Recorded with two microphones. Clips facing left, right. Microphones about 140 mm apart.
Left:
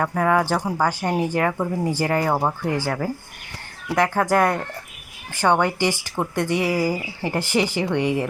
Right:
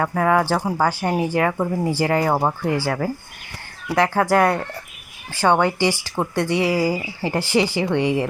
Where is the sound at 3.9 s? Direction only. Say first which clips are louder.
Right 2 dB; 15° left (ahead or behind).